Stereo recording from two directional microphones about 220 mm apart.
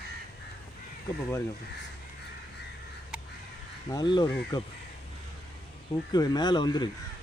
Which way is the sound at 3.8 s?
20° left (ahead or behind).